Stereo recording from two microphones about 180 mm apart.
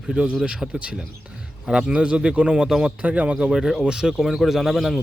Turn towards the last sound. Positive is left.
turn(degrees=0)  # may be behind; listen again after turning